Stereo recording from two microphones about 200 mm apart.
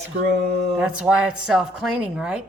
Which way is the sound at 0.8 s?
5° right (ahead or behind).